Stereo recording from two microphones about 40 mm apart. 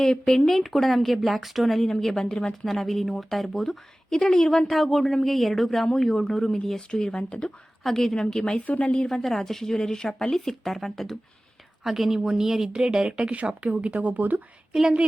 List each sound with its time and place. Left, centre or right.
0.0 s speech: centre
2.6 s speech: centre; by 7.5 s left
7.9 s speech: centre
9.0 s speech: centre
11.8 s speech: centre; by 14.4 s right
14.7 s speech: centre